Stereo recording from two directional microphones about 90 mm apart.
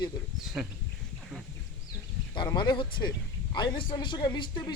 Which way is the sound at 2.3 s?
55° left (ahead or behind).